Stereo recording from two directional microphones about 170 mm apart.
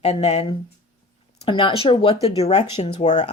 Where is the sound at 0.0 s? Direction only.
35° left (ahead or behind).